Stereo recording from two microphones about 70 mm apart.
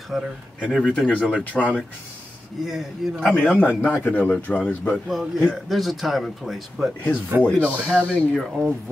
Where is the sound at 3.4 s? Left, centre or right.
Left.